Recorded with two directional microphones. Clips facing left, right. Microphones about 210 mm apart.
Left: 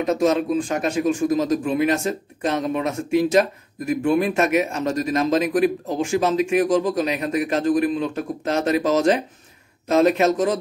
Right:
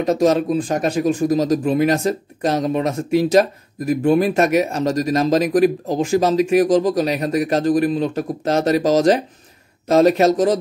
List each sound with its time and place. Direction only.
0.0 s speech: 35° right (ahead or behind)